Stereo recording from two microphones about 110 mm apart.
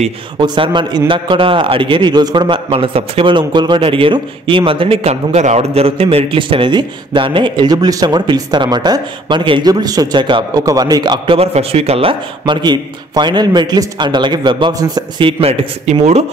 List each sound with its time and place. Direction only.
0.4 s a man's voice: 45° right (ahead or behind)
10.6 s a man's voice: 35° right (ahead or behind)
11.3 s a man's voice: 65° right (ahead or behind); by 15.3 s 40° right (ahead or behind)
16.0 s speech: 80° right